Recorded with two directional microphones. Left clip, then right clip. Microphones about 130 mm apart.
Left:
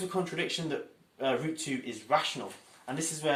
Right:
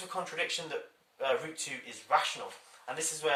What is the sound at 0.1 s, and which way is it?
Speech, 15° left (ahead or behind).